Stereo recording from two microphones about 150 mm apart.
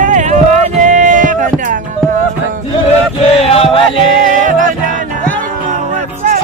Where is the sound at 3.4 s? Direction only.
40° left (ahead or behind).